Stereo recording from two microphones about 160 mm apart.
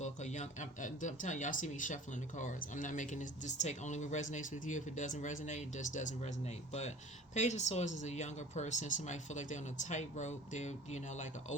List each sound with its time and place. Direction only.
0.0 s speech: 45° left (ahead or behind)